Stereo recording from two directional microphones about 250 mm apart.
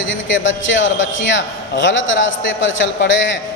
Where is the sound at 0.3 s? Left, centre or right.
Left.